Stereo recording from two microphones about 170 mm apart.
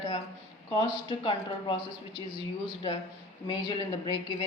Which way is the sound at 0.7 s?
30° left (ahead or behind).